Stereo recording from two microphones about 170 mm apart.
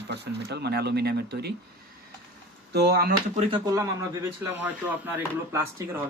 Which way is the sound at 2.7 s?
70° right (ahead or behind).